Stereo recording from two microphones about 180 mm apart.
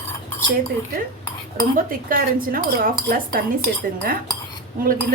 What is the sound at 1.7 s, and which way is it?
Speech, 50° right (ahead or behind).